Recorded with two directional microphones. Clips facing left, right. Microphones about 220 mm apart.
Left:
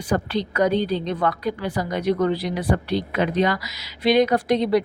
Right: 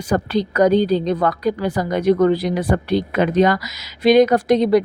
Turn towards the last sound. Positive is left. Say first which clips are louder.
# right 5 dB
turn(degrees=-45)  # may be behind; listen again after turning